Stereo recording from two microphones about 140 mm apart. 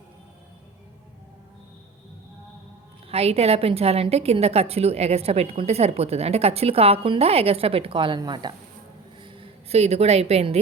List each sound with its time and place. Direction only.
3.1 s a woman's voice: 45° right (ahead or behind)